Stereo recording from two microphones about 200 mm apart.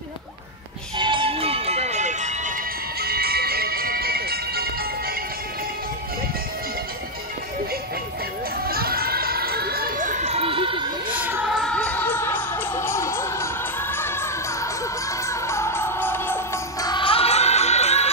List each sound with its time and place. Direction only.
0.9 s music: 25° right (ahead or behind)
3.0 s music: 50° right (ahead or behind)
8.6 s a sound: 50° right (ahead or behind); by 11.1 s 25° right (ahead or behind)
11.6 s music: 5° left (ahead or behind); by 18.1 s 30° left (ahead or behind)